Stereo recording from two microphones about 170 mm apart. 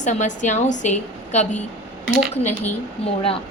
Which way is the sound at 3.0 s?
35° left (ahead or behind).